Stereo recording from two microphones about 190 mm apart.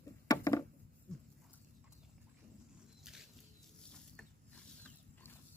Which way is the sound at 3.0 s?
Centre (ahead or behind).